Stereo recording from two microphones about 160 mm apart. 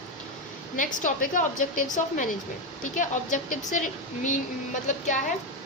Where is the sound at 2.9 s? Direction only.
55° left (ahead or behind).